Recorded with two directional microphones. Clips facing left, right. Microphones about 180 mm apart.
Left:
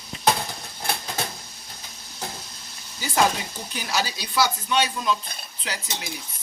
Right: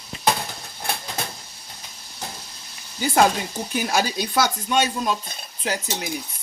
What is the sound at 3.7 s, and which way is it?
Speech, 50° right (ahead or behind).